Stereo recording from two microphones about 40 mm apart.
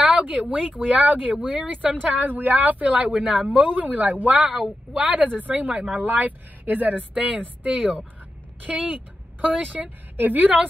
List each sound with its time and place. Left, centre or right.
0.0 s speech: right
4.5 s speech: centre
5.0 s speech: right
10.1 s speech: right